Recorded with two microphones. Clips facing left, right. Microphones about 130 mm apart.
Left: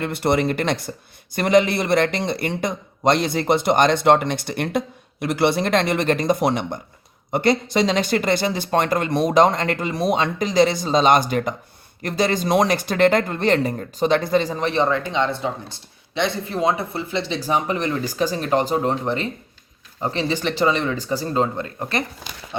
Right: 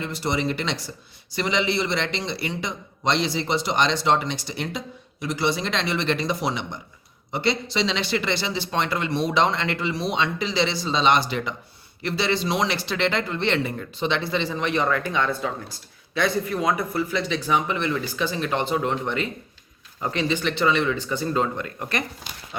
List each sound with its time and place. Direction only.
0.0 s speech: 55° left (ahead or behind); by 22.0 s 30° left (ahead or behind)